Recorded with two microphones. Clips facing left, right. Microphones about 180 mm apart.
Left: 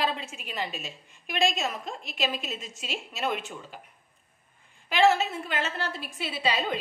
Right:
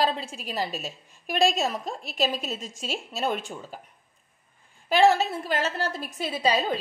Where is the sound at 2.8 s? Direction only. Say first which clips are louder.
Right 3 dB; 35° right (ahead or behind).